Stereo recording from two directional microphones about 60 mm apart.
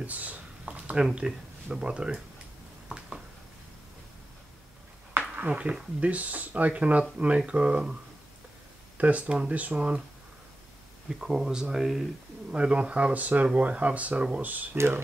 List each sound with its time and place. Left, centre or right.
0.0 s a sound: right
1.1 s speech: centre
5.3 s speech: right
11.1 s speech: centre
12.4 s speech: centre